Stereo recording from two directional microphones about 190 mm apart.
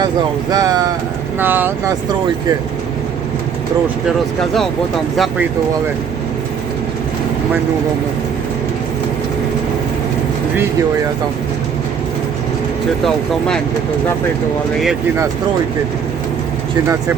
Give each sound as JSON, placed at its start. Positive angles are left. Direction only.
{"t": 0.5, "sound": "speech", "side_deg": -20}
{"t": 4.4, "sound": "speech", "side_deg": 0}